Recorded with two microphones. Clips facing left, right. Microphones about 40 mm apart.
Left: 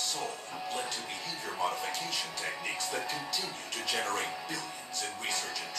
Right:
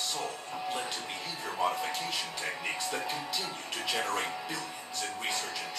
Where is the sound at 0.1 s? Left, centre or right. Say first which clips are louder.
Right 1 dB; centre.